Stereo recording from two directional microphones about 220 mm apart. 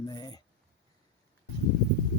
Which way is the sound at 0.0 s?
20° left (ahead or behind).